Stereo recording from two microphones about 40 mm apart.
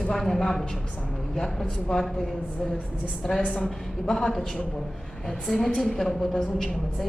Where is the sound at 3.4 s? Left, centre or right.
Left.